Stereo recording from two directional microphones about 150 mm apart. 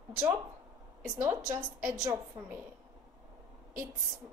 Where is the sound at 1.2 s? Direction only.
20° right (ahead or behind).